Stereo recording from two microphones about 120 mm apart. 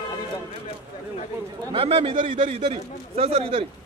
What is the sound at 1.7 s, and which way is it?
A man's voice, 50° right (ahead or behind).